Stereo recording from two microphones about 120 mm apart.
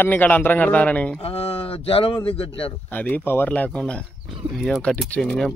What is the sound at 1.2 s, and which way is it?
Speech, 55° left (ahead or behind).